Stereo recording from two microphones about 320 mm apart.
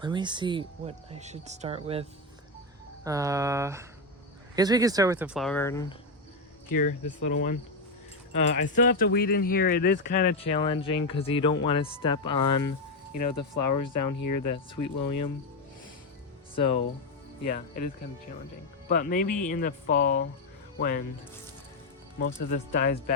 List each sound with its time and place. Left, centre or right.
0.0 s speech: centre
6.7 s speech: left
8.7 s speech: left
13.1 s speech: left
16.6 s speech: centre
22.4 s speech: left